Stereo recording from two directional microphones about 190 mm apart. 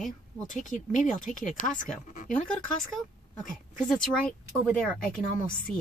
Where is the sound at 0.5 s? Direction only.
40° left (ahead or behind).